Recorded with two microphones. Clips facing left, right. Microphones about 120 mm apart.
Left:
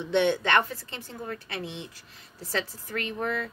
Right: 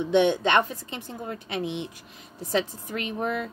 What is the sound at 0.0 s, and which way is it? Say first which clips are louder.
A woman's voice: right 3 dB; 15° right (ahead or behind).